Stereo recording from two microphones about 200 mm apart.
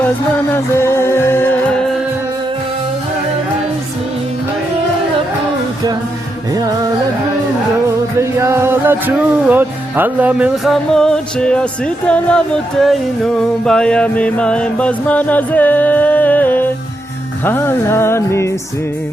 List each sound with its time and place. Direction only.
0.5 s music: 10° left (ahead or behind)
6.5 s music: 20° right (ahead or behind)
8.4 s music: 15° right (ahead or behind); by 18.5 s 15° left (ahead or behind)